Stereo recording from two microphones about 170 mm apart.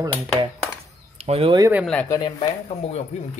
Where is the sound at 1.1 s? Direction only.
35° right (ahead or behind).